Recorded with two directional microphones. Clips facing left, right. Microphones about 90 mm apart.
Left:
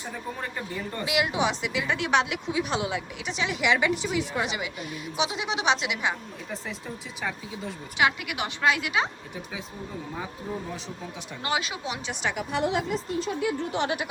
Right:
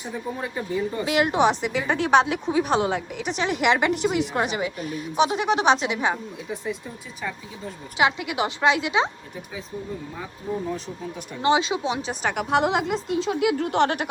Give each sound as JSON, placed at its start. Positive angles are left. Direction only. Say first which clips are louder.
{"t": 0.0, "sound": "speech", "louder": "right 4 dB", "side_deg": -5}
{"t": 1.0, "sound": "speech", "louder": "right 5 dB", "side_deg": -45}
{"t": 7.9, "sound": "a woman's voice", "louder": "right 3 dB", "side_deg": -25}
{"t": 11.4, "sound": "a woman's voice", "louder": "right 9 dB", "side_deg": -25}
{"t": 12.2, "sound": "a woman's voice", "louder": "right 2 dB", "side_deg": -55}
{"t": 12.5, "sound": "a woman's voice", "louder": "right 6 dB", "side_deg": -90}